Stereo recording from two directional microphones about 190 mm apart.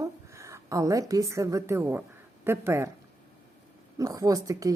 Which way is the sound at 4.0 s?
20° right (ahead or behind).